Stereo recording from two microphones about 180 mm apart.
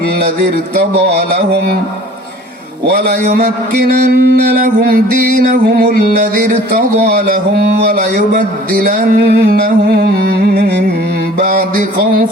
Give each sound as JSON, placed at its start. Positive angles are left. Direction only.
{"t": 2.8, "sound": "music", "side_deg": -60}
{"t": 8.8, "sound": "music", "side_deg": -65}